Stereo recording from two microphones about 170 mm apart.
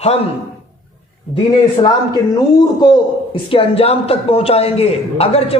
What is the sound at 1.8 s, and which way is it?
A man's voice, 30° left (ahead or behind).